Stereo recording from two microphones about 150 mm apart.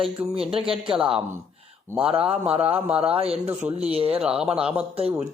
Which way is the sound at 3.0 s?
40° right (ahead or behind).